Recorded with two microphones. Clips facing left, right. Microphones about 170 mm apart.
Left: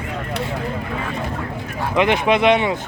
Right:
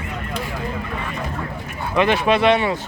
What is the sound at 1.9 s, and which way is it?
Speech, 15° left (ahead or behind).